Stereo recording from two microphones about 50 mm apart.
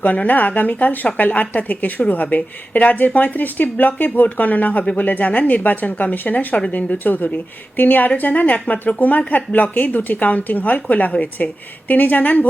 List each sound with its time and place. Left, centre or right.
0.0 s a woman's voice: left